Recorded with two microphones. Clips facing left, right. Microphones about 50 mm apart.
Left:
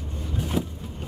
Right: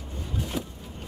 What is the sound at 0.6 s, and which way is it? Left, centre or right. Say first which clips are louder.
Vehicle: left 7 dB; centre.